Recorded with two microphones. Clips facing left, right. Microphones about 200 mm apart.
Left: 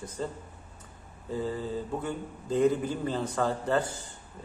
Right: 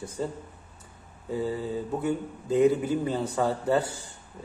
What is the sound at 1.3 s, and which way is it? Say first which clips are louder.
A man's voice: right 2 dB; 10° right (ahead or behind).